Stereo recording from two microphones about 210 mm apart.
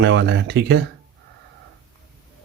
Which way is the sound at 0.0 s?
55° right (ahead or behind).